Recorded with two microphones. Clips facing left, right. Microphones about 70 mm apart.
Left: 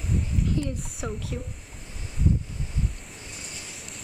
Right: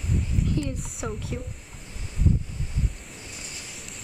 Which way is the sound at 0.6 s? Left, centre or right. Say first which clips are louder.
Right 1 dB; left.